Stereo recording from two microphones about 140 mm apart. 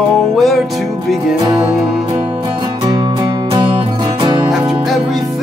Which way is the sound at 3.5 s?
35° right (ahead or behind).